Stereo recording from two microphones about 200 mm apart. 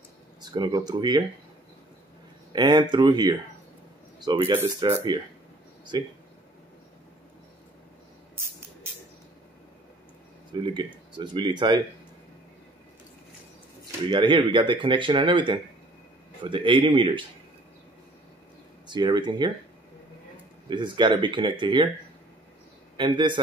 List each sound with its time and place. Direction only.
0.4 s speech: 20° right (ahead or behind)
2.5 s speech: 20° right (ahead or behind)
10.5 s speech: 20° right (ahead or behind)
14.1 s speech: 25° right (ahead or behind)
18.9 s speech: 20° right (ahead or behind)
20.6 s speech: 25° right (ahead or behind)
22.9 s speech: 25° right (ahead or behind)